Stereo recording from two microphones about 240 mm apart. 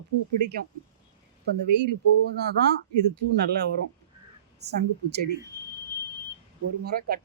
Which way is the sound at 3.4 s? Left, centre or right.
Right.